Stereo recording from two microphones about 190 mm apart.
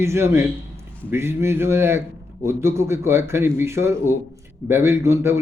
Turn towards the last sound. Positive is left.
turn(degrees=-15)  # may be behind; listen again after turning